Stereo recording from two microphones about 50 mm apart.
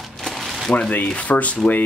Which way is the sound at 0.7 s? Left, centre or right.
Left.